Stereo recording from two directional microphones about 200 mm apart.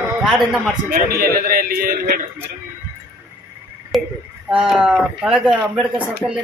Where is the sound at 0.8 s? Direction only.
50° right (ahead or behind).